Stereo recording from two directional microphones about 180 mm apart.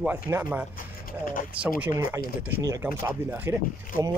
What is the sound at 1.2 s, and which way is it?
Speech, 50° left (ahead or behind).